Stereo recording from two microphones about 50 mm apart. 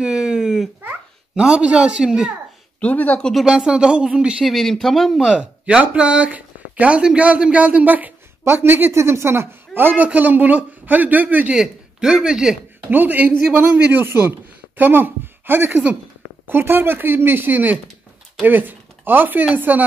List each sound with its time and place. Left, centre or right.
0.0 s a sound: centre
1.3 s speech: centre
2.8 s speech: left
3.4 s speech: centre
4.5 s speech: centre
5.3 s a man's voice: centre; by 8.9 s right
8.9 s speech: right
10.1 s a man's voice: right
11.5 s speech: centre
12.9 s a man's voice: right
13.7 s a man's voice: right